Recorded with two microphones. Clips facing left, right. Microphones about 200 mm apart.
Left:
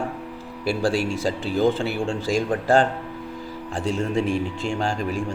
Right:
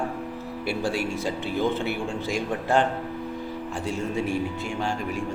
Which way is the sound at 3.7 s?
90° left.